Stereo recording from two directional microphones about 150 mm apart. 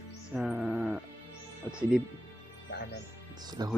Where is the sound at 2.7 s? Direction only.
90° left.